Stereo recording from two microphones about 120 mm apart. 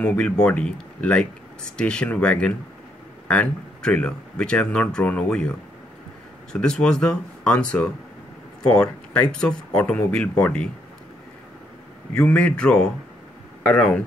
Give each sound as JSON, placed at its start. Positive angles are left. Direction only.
{"t": 0.0, "sound": "speech", "side_deg": 10}
{"t": 6.5, "sound": "speech", "side_deg": 5}
{"t": 9.1, "sound": "speech", "side_deg": 10}
{"t": 12.1, "sound": "speech", "side_deg": 10}